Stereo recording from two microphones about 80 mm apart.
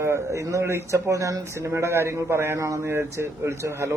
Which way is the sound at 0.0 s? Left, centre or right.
Right.